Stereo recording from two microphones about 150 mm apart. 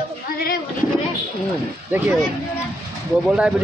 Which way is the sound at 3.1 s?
5° right (ahead or behind).